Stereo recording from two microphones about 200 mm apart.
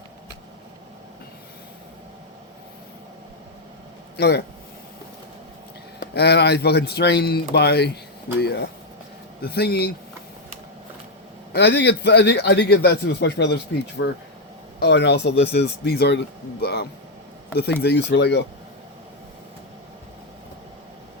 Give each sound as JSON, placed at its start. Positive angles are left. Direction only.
{"t": 4.2, "sound": "a man's voice", "side_deg": 55}
{"t": 6.0, "sound": "a man's voice", "side_deg": 55}
{"t": 11.5, "sound": "a man's voice", "side_deg": 55}